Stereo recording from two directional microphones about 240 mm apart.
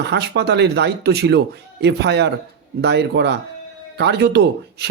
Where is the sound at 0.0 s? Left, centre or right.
Right.